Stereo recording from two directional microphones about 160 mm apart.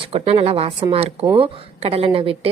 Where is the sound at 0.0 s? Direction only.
40° right (ahead or behind).